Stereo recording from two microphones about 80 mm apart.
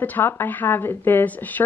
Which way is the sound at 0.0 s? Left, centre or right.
Left.